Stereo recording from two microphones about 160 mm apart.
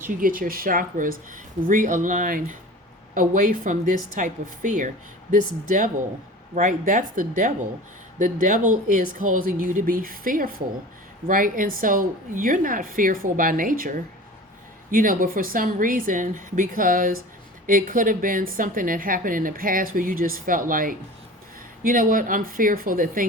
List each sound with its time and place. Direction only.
0.2 s a woman's voice: 60° right (ahead or behind)